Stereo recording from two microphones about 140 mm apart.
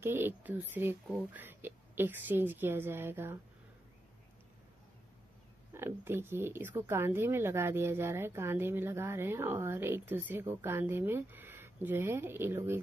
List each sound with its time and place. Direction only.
0.0 s speech: 15° right (ahead or behind)
5.7 s speech: 15° right (ahead or behind)